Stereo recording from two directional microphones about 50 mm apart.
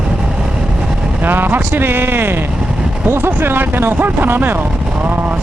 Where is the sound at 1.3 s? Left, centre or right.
Right.